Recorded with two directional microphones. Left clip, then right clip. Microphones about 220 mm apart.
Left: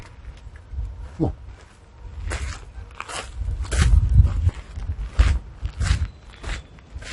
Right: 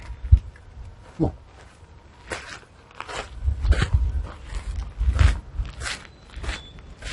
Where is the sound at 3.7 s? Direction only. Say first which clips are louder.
Left 2 dB; 35° left (ahead or behind).